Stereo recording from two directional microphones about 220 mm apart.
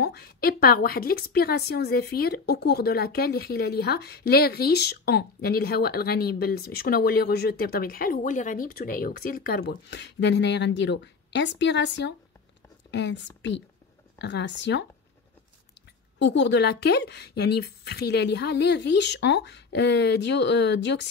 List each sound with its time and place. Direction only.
0.0 s a woman's voice: 45° left (ahead or behind)
16.2 s a woman's voice: 55° left (ahead or behind)